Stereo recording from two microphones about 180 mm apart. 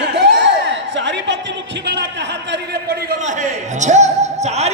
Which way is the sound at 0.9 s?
80° right.